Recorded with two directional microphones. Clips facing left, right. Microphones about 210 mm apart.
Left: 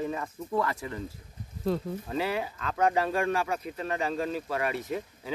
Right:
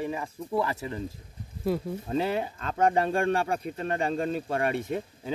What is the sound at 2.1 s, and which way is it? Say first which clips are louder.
Speech: right 3 dB; 25° right (ahead or behind).